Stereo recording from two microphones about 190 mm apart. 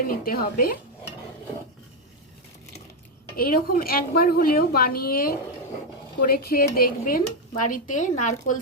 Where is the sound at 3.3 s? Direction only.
50° left (ahead or behind).